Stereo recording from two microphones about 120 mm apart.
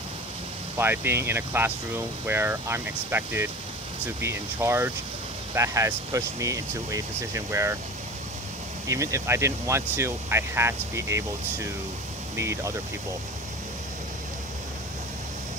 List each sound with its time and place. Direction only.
0.7 s speech: 20° right (ahead or behind)
8.8 s speech: 25° right (ahead or behind)